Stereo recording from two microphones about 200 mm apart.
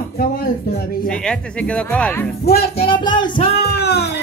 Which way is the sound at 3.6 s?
55° left (ahead or behind).